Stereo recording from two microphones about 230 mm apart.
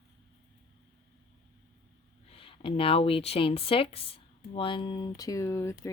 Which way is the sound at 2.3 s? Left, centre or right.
Left.